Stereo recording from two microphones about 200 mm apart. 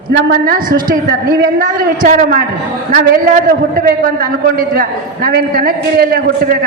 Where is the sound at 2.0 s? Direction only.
45° right (ahead or behind).